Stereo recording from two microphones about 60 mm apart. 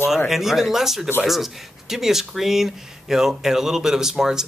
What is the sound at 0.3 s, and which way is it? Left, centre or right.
Speech, centre.